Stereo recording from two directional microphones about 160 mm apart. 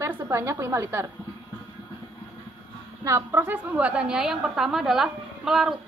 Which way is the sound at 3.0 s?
20° right (ahead or behind).